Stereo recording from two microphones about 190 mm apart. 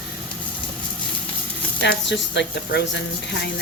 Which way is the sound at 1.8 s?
65° left (ahead or behind).